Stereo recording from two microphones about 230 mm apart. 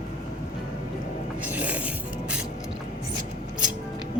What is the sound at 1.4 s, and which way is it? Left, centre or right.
Music, centre.